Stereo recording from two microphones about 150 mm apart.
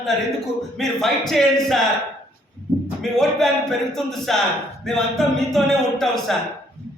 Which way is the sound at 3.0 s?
5° left (ahead or behind).